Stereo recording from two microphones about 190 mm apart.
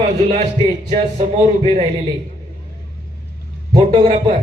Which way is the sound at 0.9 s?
30° right (ahead or behind).